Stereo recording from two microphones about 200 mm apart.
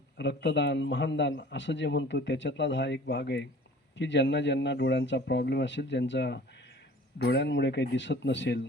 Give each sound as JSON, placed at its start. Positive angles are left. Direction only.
{"t": 0.2, "sound": "a man's voice", "side_deg": 60}